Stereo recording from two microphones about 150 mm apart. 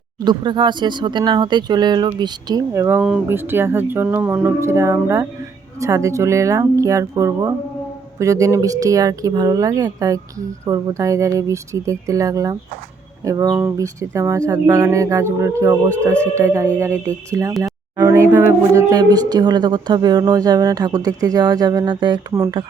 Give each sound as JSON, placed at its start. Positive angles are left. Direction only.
{"t": 0.3, "sound": "speech", "side_deg": -30}